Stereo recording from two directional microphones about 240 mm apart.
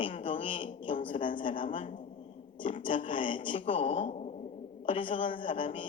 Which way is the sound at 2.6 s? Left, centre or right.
Left.